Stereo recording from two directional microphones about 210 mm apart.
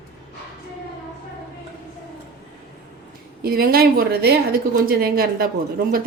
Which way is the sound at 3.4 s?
45° right (ahead or behind).